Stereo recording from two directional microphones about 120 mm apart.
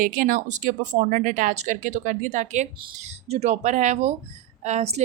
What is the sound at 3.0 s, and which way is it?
Speech, 65° right (ahead or behind).